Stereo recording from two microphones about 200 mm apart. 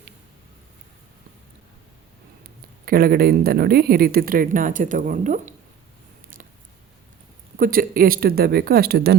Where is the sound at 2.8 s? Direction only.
45° right (ahead or behind).